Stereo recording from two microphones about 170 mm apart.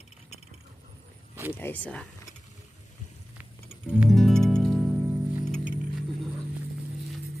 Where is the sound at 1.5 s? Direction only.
10° left (ahead or behind).